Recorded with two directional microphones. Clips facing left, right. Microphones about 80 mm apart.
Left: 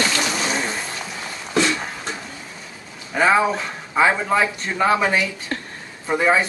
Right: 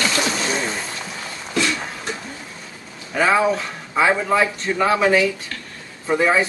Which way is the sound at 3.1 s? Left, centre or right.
Centre.